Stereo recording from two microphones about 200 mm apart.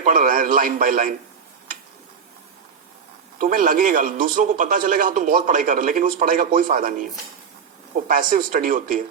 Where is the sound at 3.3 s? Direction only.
45° right (ahead or behind).